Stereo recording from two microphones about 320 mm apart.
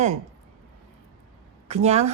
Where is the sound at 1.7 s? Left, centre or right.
Right.